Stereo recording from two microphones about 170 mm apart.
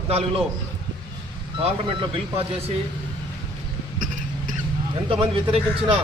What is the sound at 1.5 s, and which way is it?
Speech, 30° right (ahead or behind).